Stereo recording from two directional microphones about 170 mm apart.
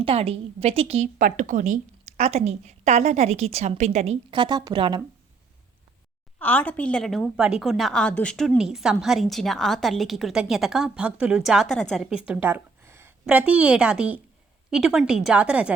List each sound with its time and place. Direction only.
0.0 s a woman's voice: 35° right (ahead or behind)
6.4 s a woman's voice: 10° left (ahead or behind); by 15.7 s 5° right (ahead or behind)